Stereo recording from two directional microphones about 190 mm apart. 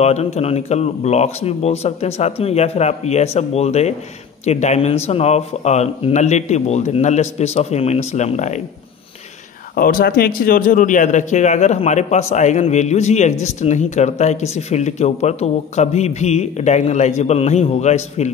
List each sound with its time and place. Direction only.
0.0 s speech: 35° left (ahead or behind)
9.8 s speech: 50° left (ahead or behind)